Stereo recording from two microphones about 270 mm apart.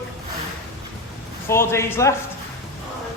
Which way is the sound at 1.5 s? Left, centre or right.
Centre.